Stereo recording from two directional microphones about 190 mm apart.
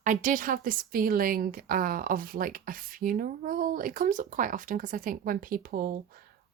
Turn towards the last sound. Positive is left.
turn(degrees=-50)  # may be behind; listen again after turning